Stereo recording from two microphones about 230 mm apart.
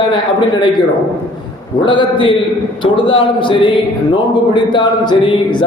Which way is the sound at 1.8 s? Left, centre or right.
Left.